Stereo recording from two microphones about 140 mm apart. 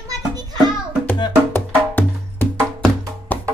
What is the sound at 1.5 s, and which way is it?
Music, 15° left (ahead or behind).